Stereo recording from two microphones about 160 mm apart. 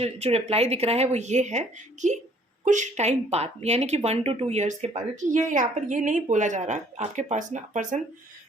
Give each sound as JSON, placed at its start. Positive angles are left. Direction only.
{"t": 0.0, "sound": "speech", "side_deg": -40}